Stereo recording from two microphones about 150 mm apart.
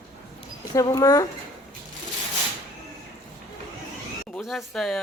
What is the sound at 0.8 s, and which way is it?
Speech, 25° left (ahead or behind).